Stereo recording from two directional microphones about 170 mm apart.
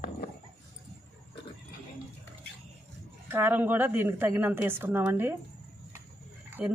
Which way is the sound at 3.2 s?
15° right (ahead or behind).